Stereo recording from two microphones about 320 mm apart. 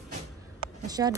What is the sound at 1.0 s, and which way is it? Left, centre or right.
Speech, centre.